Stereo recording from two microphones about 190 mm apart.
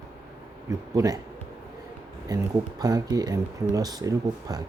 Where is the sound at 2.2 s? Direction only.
20° right (ahead or behind).